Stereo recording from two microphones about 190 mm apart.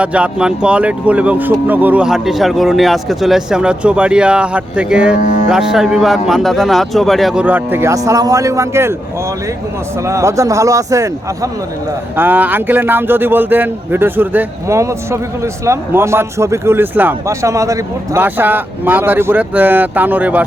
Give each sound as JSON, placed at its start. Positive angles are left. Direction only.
{"t": 0.0, "sound": "speech", "side_deg": -5}
{"t": 5.1, "sound": "speech", "side_deg": 40}
{"t": 5.5, "sound": "speech", "side_deg": -5}
{"t": 10.0, "sound": "speech", "side_deg": -15}
{"t": 12.1, "sound": "speech", "side_deg": -10}